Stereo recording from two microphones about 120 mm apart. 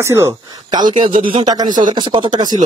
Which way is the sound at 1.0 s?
45° right (ahead or behind).